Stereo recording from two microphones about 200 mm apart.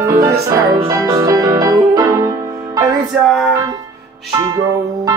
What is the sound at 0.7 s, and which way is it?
Music, 20° right (ahead or behind).